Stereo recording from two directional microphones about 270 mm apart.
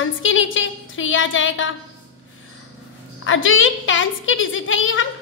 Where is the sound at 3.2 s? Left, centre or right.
Left.